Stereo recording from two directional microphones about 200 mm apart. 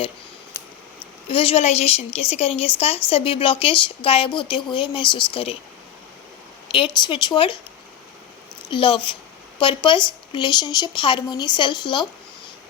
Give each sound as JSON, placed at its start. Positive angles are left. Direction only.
{"t": 1.3, "sound": "speech", "side_deg": 25}
{"t": 6.7, "sound": "speech", "side_deg": 25}
{"t": 8.7, "sound": "speech", "side_deg": 25}